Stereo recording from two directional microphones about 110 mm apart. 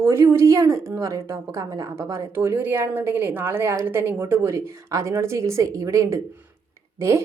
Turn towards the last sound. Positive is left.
turn(degrees=-25)  # may be behind; listen again after turning